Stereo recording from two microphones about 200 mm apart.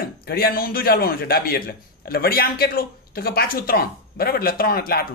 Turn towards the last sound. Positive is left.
turn(degrees=50)  # may be behind; listen again after turning